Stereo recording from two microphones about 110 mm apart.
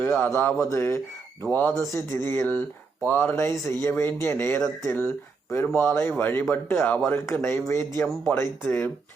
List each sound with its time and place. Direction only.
0.0 s a man's voice: 15° left (ahead or behind)